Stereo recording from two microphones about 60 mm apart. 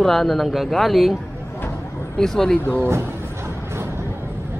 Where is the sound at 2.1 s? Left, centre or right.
Centre.